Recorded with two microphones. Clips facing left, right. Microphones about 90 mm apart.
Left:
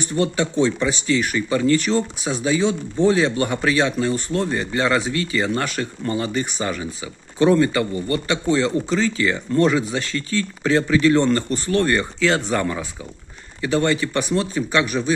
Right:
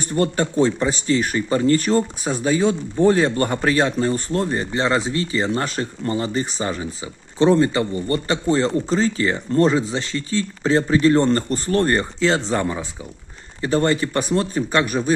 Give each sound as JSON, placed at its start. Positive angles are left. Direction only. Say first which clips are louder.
{"t": 0.0, "sound": "speech", "louder": "right 1 dB", "side_deg": -45}
{"t": 13.6, "sound": "speech", "louder": "right 1 dB", "side_deg": -40}